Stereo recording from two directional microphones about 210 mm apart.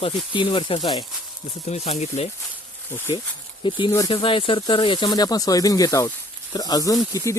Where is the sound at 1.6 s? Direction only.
30° left (ahead or behind).